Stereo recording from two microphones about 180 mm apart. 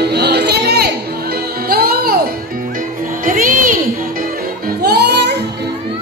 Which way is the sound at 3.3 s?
50° right (ahead or behind).